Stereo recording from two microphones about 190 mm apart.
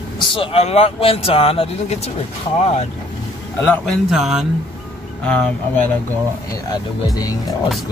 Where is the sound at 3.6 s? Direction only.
Centre (ahead or behind).